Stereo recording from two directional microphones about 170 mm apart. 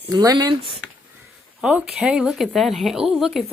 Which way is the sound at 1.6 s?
5° right (ahead or behind).